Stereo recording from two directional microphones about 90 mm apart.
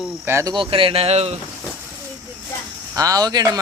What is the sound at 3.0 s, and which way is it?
Speech, 45° right (ahead or behind).